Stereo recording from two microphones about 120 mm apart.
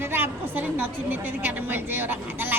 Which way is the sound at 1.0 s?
15° right (ahead or behind).